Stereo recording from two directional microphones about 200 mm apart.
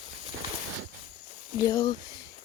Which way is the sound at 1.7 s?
20° left (ahead or behind).